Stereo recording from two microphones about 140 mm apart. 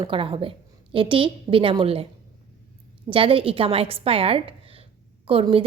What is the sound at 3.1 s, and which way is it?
A woman's voice, 40° right (ahead or behind).